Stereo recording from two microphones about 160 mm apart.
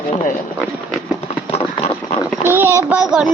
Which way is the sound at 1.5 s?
40° left (ahead or behind).